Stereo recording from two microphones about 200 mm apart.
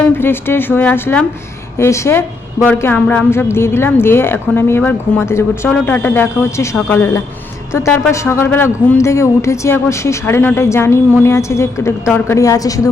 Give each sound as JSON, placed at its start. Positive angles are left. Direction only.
{"t": 0.2, "sound": "a woman's voice", "side_deg": 10}